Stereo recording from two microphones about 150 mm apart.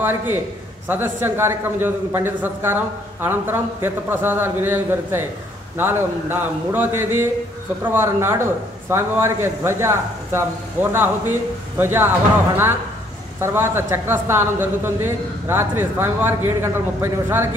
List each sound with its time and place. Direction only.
0.0 s a man's voice: 15° right (ahead or behind)
13.4 s a man's voice: 15° right (ahead or behind)